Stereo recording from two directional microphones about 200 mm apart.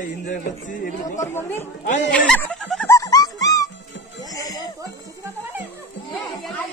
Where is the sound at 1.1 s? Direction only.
15° left (ahead or behind).